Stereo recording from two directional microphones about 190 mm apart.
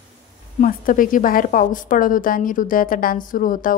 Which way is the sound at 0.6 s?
45° left (ahead or behind).